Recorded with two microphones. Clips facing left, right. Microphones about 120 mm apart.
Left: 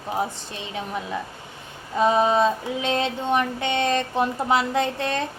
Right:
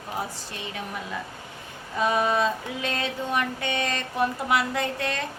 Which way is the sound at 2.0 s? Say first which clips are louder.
Left 5 dB; 25° left (ahead or behind).